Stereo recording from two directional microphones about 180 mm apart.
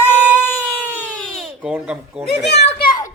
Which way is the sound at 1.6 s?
5° right (ahead or behind).